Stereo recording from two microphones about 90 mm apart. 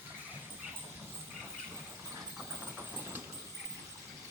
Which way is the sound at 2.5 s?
25° right (ahead or behind).